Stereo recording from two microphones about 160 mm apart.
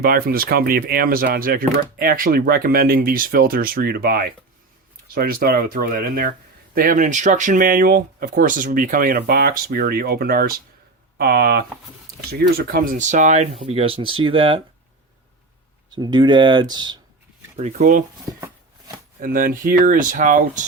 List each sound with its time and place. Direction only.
0.0 s speech: 70° right (ahead or behind)
12.3 s speech: 65° right (ahead or behind); by 14.6 s 35° right (ahead or behind)
16.0 s speech: 30° right (ahead or behind)
17.6 s speech: 45° right (ahead or behind)
18.3 s a sound: 20° right (ahead or behind)
19.2 s speech: 60° right (ahead or behind)